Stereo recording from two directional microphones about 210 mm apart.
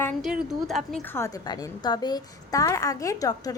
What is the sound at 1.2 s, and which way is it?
A woman's voice, 15° left (ahead or behind).